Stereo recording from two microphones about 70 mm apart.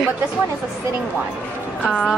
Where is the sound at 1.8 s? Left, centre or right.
Centre.